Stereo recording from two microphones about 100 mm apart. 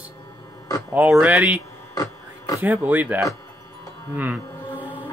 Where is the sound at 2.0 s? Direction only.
35° left (ahead or behind).